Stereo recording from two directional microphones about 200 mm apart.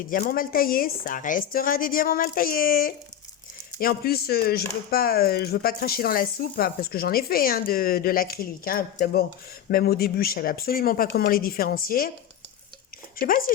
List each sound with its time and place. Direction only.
0.1 s speech: 45° left (ahead or behind)
13.1 s speech: 45° left (ahead or behind)